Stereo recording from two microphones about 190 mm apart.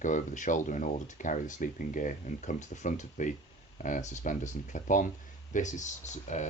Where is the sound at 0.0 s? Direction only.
40° left (ahead or behind).